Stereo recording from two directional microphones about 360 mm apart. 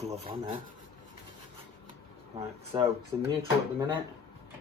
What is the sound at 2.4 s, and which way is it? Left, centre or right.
Speech, centre.